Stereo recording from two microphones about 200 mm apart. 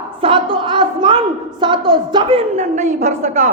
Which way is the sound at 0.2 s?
25° right (ahead or behind).